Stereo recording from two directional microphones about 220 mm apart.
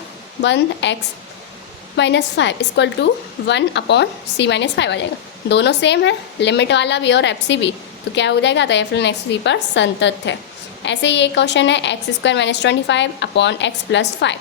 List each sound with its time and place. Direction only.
0.4 s a woman's voice: 55° left (ahead or behind)
2.0 s a woman's voice: 50° left (ahead or behind)